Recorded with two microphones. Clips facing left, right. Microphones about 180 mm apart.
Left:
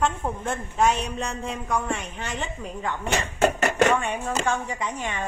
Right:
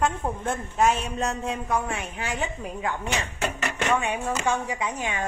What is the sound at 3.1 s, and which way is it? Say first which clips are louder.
Speech: left 6 dB; 50° left (ahead or behind).